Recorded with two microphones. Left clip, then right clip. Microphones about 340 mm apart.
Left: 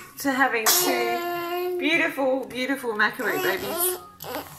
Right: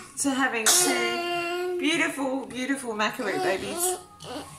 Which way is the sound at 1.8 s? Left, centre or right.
Centre.